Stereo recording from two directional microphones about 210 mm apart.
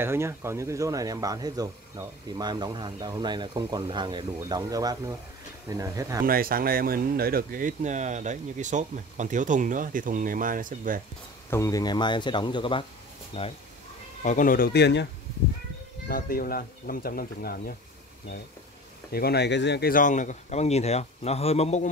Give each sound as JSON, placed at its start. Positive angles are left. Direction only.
{"t": 0.0, "sound": "speech", "side_deg": -10}
{"t": 6.2, "sound": "speech", "side_deg": -45}
{"t": 11.5, "sound": "speech", "side_deg": 15}
{"t": 16.1, "sound": "speech", "side_deg": 45}
{"t": 19.1, "sound": "speech", "side_deg": 50}